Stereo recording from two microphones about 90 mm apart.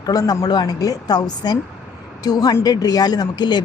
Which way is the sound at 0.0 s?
45° left (ahead or behind).